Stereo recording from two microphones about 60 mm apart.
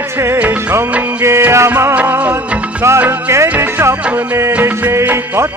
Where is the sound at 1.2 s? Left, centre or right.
Right.